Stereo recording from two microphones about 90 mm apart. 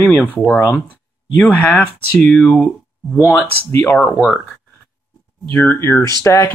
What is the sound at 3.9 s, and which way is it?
Speech, 5° left (ahead or behind).